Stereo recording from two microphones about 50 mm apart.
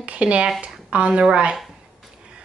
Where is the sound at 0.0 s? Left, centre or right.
Right.